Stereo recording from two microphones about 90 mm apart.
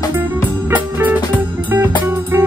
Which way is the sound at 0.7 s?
20° right (ahead or behind).